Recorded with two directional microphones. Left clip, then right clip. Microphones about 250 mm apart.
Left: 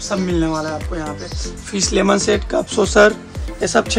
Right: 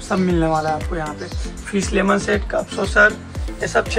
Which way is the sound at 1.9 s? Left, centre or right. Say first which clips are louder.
Left 2 dB; centre.